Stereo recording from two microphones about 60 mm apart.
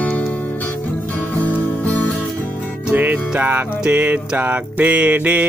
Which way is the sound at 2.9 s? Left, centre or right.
Right.